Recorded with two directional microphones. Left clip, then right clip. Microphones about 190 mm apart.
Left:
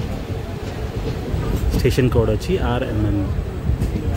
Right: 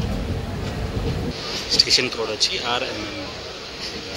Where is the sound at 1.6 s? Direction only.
35° left (ahead or behind).